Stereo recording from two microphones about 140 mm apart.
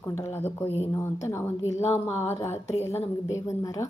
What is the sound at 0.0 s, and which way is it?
A woman's voice, 20° left (ahead or behind).